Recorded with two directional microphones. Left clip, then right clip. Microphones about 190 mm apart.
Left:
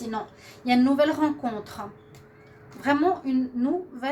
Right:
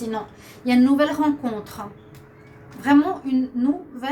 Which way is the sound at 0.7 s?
45° left (ahead or behind).